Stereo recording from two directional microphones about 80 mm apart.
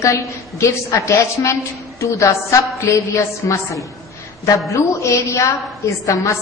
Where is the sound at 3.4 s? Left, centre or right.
Left.